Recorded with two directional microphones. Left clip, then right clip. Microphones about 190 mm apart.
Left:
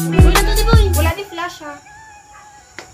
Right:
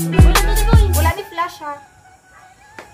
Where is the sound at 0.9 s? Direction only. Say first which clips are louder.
Right 1 dB; 65° right (ahead or behind).